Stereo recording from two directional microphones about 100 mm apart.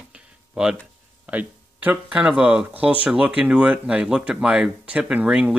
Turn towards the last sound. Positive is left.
turn(degrees=-10)  # may be behind; listen again after turning